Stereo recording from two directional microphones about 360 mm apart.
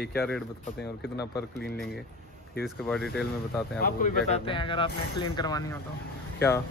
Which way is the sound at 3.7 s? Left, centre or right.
Left.